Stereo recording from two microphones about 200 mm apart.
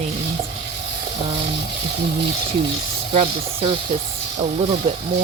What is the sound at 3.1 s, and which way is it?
Speech, 30° right (ahead or behind).